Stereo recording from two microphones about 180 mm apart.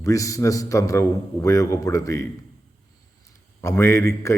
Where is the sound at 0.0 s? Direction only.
20° left (ahead or behind).